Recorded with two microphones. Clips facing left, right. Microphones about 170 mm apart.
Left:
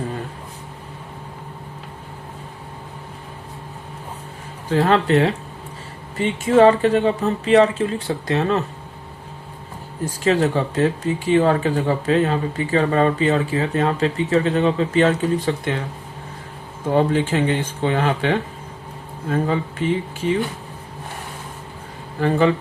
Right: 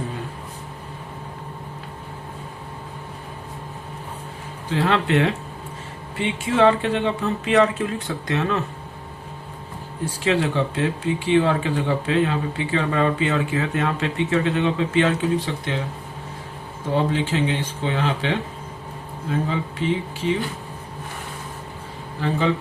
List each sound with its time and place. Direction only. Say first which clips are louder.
4.7 s speech: left 4 dB; 45° left (ahead or behind)
10.2 s speech: left 3 dB; 40° left (ahead or behind)
16.9 s speech: left 4 dB; 50° left (ahead or behind)
19.8 s speech: left 1 dB; 50° left (ahead or behind)
22.2 s speech: left 5 dB; 55° left (ahead or behind)